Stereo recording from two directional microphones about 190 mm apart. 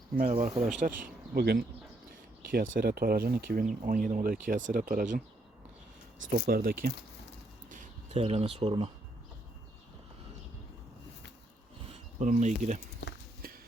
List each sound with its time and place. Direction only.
0.2 s speech: 40° right (ahead or behind)
6.4 s speech: 50° right (ahead or behind)
7.7 s bird: 45° right (ahead or behind)
8.2 s speech: 30° right (ahead or behind)
12.2 s speech: 40° right (ahead or behind)